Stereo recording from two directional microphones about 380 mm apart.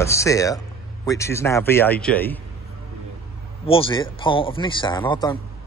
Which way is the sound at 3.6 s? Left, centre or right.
Centre.